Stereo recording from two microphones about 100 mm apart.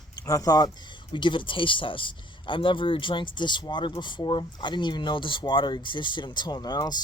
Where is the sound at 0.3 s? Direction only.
35° left (ahead or behind).